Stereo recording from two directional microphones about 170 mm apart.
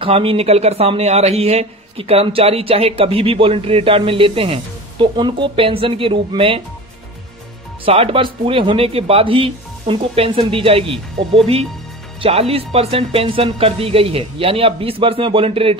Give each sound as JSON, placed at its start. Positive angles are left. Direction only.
{"t": 0.0, "sound": "a man's voice", "side_deg": -35}
{"t": 7.8, "sound": "a man's voice", "side_deg": -35}